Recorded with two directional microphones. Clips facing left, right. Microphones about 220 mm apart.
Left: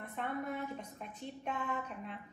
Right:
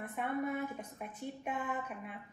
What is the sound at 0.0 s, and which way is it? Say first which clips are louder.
A woman's voice: right 3 dB; 10° right (ahead or behind).